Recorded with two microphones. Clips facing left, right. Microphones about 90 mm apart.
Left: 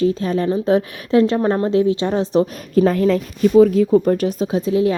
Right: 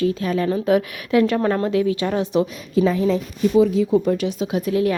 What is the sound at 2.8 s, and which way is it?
Speech, 55° left (ahead or behind).